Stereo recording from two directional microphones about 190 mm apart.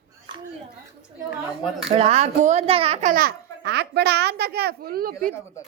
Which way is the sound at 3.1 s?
55° right (ahead or behind).